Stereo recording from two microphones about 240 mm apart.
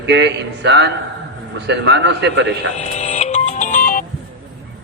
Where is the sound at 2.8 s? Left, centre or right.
Left.